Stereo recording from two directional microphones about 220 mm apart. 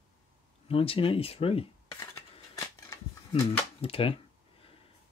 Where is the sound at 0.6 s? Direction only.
25° left (ahead or behind).